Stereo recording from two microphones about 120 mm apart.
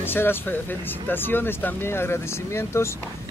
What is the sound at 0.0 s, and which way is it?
Speech, 15° left (ahead or behind).